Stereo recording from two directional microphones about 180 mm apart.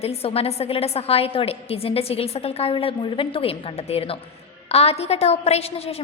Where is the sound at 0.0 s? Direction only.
35° left (ahead or behind).